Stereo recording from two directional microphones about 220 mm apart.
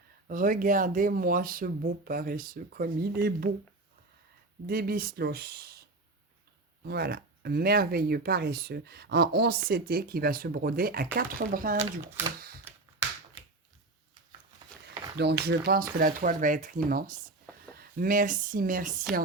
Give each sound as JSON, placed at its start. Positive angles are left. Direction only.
{"t": 0.3, "sound": "speech", "side_deg": -40}
{"t": 4.6, "sound": "speech", "side_deg": -45}
{"t": 14.8, "sound": "speech", "side_deg": -50}